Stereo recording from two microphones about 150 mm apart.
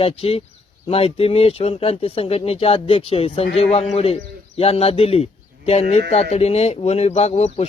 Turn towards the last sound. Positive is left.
turn(degrees=45)  # may be behind; listen again after turning